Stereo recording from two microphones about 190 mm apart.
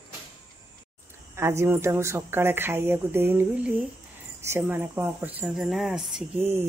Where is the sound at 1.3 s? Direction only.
15° right (ahead or behind).